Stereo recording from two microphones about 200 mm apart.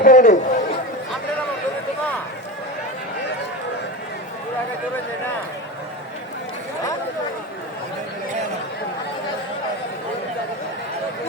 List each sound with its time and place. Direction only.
0.0 s chatter: 40° left (ahead or behind)